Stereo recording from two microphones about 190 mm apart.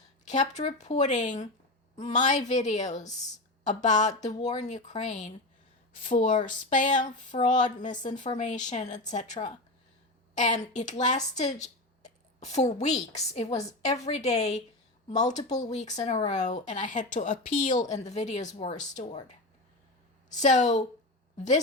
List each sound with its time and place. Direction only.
0.3 s a woman's voice: 40° left (ahead or behind)
20.4 s a woman's voice: 40° left (ahead or behind)